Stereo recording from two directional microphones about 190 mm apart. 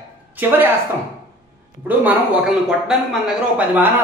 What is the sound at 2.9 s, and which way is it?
Speech, 5° right (ahead or behind).